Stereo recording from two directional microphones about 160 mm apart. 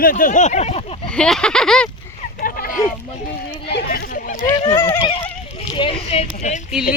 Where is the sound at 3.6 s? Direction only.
90° left.